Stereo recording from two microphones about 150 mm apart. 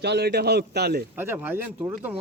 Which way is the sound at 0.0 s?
90° right.